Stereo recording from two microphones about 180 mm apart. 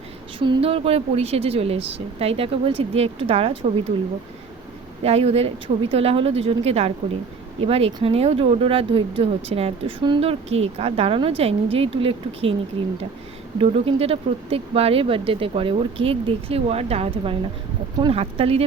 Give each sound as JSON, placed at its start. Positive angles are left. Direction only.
{"t": 0.3, "sound": "speech", "side_deg": -30}
{"t": 5.0, "sound": "speech", "side_deg": -35}